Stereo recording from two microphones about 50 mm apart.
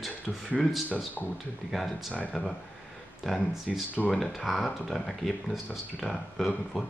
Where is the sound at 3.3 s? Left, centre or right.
Centre.